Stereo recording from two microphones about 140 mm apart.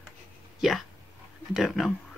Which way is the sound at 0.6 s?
Centre (ahead or behind).